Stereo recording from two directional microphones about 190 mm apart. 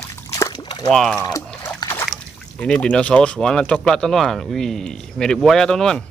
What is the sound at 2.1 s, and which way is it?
Speech, 5° left (ahead or behind).